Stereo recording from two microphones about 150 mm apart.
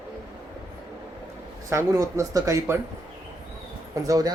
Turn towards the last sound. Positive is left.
turn(degrees=-25)  # may be behind; listen again after turning